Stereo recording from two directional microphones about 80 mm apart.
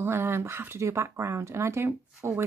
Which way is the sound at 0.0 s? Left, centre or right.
Right.